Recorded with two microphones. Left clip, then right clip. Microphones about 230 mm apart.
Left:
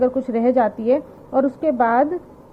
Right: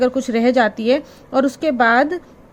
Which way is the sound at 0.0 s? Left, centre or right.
Right.